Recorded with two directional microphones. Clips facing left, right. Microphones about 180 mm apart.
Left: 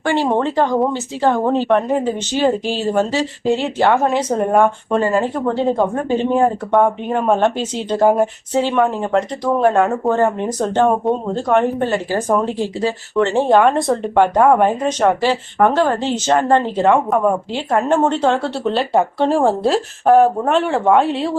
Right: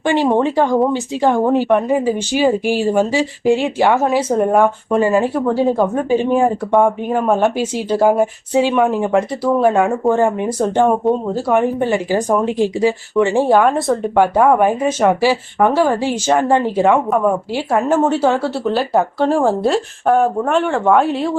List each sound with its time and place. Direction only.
0.0 s speech: 15° right (ahead or behind); by 21.3 s centre (ahead or behind)